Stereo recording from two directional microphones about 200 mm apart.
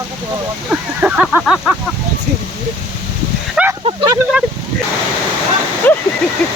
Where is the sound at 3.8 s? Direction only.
25° right (ahead or behind).